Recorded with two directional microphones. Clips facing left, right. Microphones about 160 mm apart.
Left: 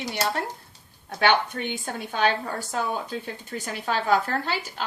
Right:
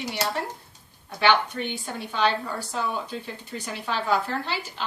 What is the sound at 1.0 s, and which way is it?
A woman's voice, 50° left (ahead or behind).